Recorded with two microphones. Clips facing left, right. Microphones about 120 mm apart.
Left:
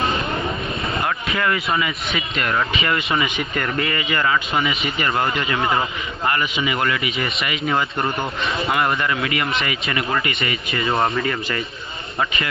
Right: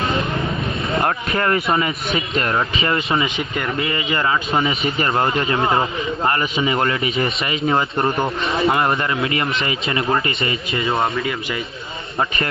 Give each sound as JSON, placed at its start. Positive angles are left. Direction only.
{"t": 1.0, "sound": "a man's voice", "side_deg": -40}
{"t": 10.9, "sound": "speech", "side_deg": 0}